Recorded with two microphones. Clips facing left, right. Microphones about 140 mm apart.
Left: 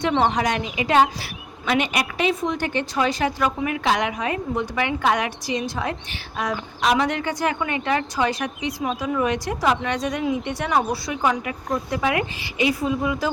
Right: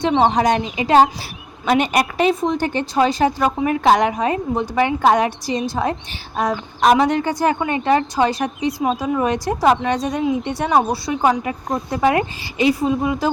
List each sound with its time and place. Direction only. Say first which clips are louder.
0.0 s a woman's voice: right 5 dB; 25° right (ahead or behind)